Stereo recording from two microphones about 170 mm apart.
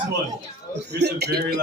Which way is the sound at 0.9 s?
75° right (ahead or behind).